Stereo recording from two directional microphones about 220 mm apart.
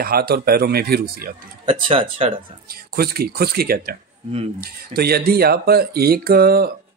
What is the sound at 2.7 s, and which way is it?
Speech, 45° right (ahead or behind).